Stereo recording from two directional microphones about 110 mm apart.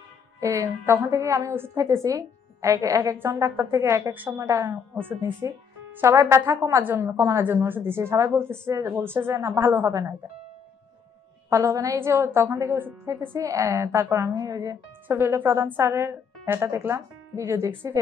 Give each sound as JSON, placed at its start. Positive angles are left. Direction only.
{"t": 0.4, "sound": "a woman's voice", "side_deg": -25}
{"t": 4.4, "sound": "a woman's voice", "side_deg": -30}
{"t": 11.5, "sound": "a woman's voice", "side_deg": -30}
{"t": 15.0, "sound": "a woman's voice", "side_deg": -20}